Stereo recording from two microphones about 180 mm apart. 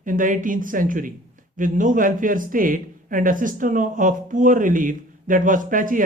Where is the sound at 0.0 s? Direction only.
45° right (ahead or behind).